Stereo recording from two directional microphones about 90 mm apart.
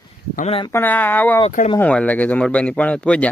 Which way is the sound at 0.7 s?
20° left (ahead or behind).